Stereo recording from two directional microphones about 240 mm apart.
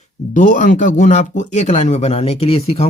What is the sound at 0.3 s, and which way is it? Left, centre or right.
Speech, left.